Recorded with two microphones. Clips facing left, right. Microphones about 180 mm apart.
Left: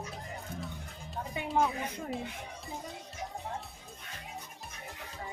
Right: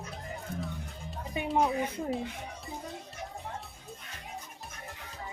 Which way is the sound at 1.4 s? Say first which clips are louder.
Right 5 dB; 20° right (ahead or behind).